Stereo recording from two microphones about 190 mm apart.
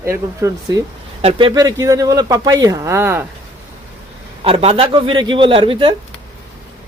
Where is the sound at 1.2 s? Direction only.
30° right (ahead or behind); by 3.2 s 15° right (ahead or behind).